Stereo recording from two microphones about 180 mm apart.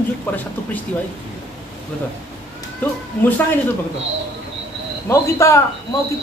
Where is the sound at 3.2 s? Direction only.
10° left (ahead or behind).